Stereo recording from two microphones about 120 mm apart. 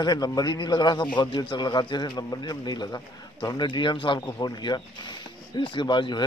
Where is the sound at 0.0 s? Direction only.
35° left (ahead or behind).